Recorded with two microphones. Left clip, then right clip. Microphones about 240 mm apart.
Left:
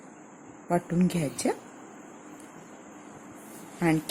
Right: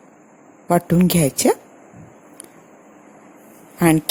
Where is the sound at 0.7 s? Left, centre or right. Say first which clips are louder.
Right 10 dB; right.